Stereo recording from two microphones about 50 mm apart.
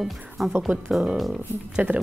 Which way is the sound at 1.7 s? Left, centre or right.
Right.